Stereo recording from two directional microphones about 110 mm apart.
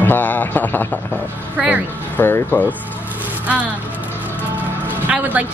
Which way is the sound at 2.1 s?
20° left (ahead or behind).